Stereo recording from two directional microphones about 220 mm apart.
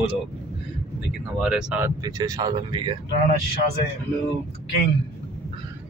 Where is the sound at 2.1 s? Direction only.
15° right (ahead or behind).